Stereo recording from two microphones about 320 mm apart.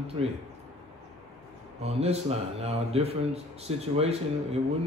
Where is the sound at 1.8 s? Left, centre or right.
Centre.